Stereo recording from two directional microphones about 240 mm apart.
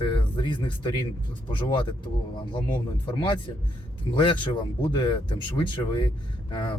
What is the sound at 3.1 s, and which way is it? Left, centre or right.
Speech, centre.